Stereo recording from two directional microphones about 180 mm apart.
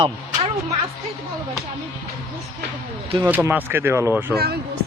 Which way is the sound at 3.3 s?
10° right (ahead or behind).